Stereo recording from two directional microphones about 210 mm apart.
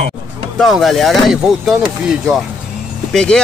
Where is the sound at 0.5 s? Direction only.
Centre (ahead or behind).